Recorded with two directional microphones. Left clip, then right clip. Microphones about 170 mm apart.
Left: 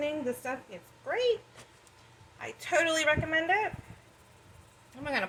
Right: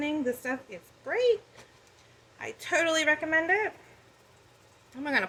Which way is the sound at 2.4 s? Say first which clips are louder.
Even; 40° right (ahead or behind).